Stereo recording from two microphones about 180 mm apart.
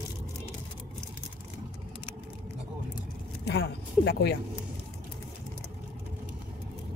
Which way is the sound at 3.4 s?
65° left (ahead or behind).